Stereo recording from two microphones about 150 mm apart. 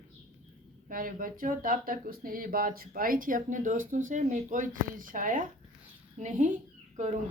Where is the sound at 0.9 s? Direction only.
65° right (ahead or behind).